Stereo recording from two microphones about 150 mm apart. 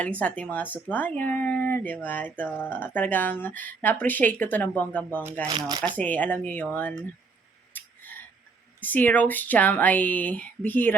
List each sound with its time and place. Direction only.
0.0 s speech: 10° left (ahead or behind)
5.5 s speech: 30° right (ahead or behind)
6.0 s speech: 10° left (ahead or behind)
7.7 s a sound: 10° left (ahead or behind)
8.8 s speech: 10° left (ahead or behind)